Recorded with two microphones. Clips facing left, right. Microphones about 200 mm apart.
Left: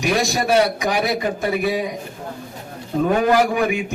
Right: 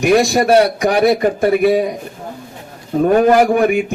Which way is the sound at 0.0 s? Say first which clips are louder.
Right 8 dB; 50° right (ahead or behind).